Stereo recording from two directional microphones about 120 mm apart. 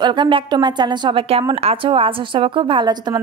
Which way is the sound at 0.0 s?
40° right (ahead or behind).